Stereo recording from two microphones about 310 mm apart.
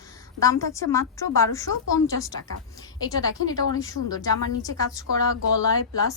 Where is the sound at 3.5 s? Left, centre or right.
Centre.